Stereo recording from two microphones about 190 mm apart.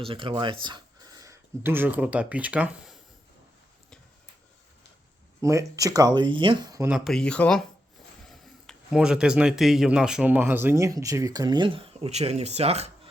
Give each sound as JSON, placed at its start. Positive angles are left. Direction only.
{"t": 0.0, "sound": "speech", "side_deg": -25}
{"t": 5.4, "sound": "speech", "side_deg": -15}
{"t": 6.9, "sound": "speech", "side_deg": 0}